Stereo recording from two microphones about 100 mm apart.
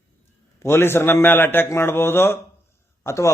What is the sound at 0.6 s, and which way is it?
A man's voice, 25° left (ahead or behind).